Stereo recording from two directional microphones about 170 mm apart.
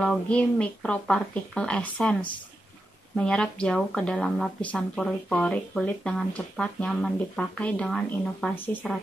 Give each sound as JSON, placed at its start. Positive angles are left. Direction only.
{"t": 0.0, "sound": "speech", "side_deg": 5}
{"t": 3.2, "sound": "speech", "side_deg": 5}